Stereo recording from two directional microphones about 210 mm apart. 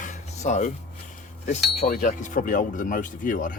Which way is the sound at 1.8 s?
35° left (ahead or behind).